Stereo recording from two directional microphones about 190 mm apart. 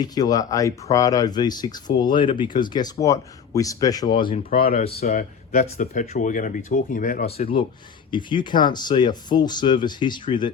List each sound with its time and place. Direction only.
0.0 s speech: 20° left (ahead or behind)
4.4 s speech: 50° left (ahead or behind); by 10.5 s 25° left (ahead or behind)